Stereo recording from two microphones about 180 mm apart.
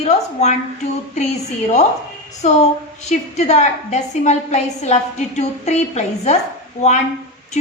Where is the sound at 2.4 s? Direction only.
40° left (ahead or behind).